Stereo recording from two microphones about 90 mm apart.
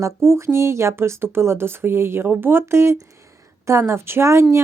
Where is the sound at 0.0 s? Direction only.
30° right (ahead or behind).